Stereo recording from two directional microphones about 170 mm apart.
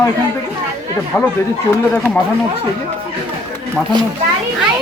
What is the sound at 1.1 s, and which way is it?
Speech, 10° left (ahead or behind).